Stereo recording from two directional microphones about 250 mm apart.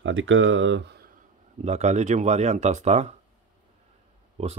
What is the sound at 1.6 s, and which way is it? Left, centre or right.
Speech, right.